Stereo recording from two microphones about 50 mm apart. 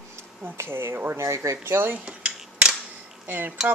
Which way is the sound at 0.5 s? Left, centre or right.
Right.